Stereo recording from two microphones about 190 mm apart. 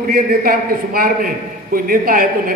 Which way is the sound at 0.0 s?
50° right (ahead or behind).